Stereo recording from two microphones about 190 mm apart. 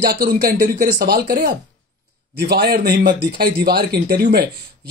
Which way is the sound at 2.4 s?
55° right (ahead or behind).